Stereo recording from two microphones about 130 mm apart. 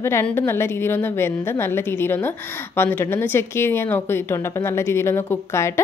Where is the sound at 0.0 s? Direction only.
20° left (ahead or behind).